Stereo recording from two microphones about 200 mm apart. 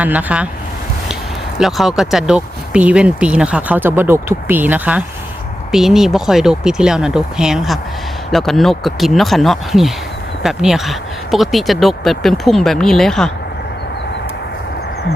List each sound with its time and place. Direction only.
0.0 s speech: 10° right (ahead or behind)
1.5 s speech: centre (ahead or behind)